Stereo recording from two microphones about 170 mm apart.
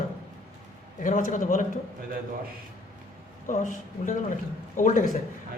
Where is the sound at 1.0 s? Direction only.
50° left (ahead or behind).